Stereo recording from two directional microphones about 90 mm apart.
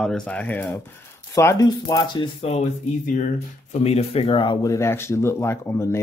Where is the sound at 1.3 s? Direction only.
40° left (ahead or behind).